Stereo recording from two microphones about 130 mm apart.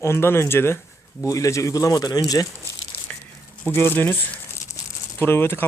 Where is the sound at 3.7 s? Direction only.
15° left (ahead or behind).